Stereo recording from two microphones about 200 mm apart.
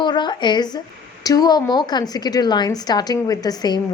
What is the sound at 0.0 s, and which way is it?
A woman's voice, 20° left (ahead or behind).